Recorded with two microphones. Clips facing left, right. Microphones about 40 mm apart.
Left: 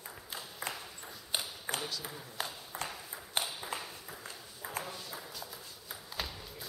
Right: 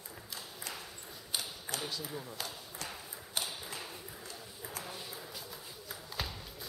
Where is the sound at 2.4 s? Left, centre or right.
Left.